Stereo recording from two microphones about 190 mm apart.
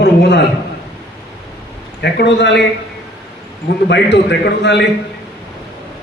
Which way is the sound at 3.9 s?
65° left (ahead or behind).